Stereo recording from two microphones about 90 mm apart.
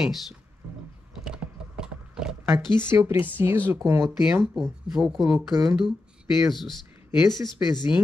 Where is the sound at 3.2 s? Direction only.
25° right (ahead or behind).